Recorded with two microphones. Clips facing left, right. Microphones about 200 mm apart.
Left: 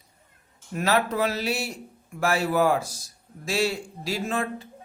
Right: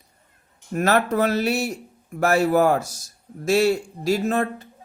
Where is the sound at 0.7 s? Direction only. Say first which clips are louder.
Right 4 dB; 50° right (ahead or behind).